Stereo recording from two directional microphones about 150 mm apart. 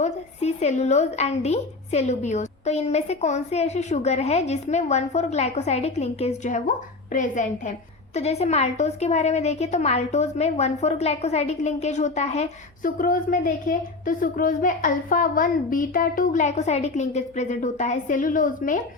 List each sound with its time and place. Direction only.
0.0 s a woman's voice: 45° left (ahead or behind)
8.1 s a woman's voice: 45° left (ahead or behind)
13.0 s a woman's voice: 65° left (ahead or behind)